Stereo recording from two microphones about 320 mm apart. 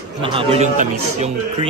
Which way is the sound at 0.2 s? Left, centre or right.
Centre.